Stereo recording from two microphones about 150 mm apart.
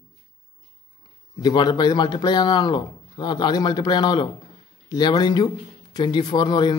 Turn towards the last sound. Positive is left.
turn(degrees=30)  # may be behind; listen again after turning